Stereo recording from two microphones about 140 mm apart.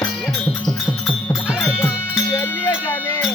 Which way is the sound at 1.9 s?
10° right (ahead or behind).